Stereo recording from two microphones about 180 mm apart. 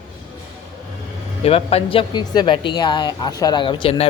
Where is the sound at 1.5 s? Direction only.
30° left (ahead or behind).